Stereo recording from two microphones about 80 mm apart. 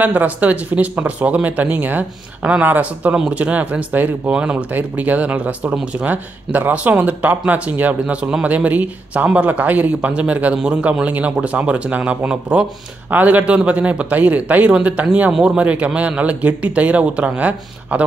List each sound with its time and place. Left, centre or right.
0.0 s speech: centre